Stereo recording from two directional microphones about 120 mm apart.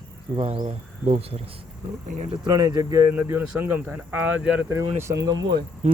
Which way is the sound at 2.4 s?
35° right (ahead or behind).